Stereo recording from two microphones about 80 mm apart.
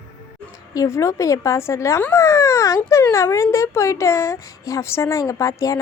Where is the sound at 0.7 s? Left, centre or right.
Left.